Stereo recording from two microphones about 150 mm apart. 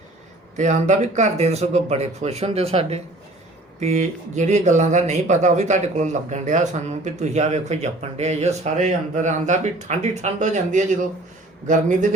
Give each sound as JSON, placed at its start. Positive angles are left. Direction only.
{"t": 0.5, "sound": "a man's voice", "side_deg": -55}